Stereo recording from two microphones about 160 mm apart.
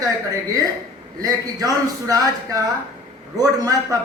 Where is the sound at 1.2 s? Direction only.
20° right (ahead or behind).